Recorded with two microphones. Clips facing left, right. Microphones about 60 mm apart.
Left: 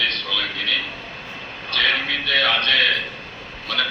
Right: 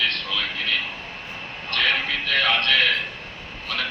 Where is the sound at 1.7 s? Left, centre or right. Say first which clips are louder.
Left 2 dB; left.